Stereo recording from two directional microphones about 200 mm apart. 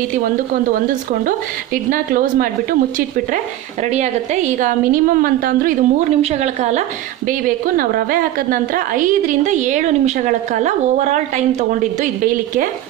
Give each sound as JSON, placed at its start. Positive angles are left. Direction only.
{"t": 1.2, "sound": "a woman's voice", "side_deg": -45}
{"t": 3.8, "sound": "a woman's voice", "side_deg": -35}
{"t": 7.2, "sound": "a woman's voice", "side_deg": -45}